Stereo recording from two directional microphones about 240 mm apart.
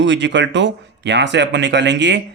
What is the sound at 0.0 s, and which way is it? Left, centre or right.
Speech, right.